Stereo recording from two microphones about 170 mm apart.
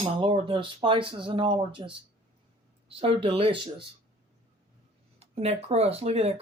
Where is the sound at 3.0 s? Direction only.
35° right (ahead or behind).